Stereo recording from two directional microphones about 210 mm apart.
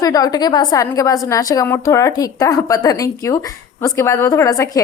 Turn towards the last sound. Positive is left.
turn(degrees=15)  # may be behind; listen again after turning